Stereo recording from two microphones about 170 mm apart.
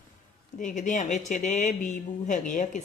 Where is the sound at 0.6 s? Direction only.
50° left (ahead or behind).